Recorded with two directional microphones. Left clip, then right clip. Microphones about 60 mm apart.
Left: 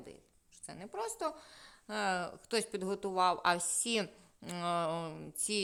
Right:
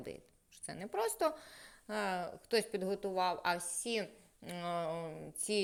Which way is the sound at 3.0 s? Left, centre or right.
Left.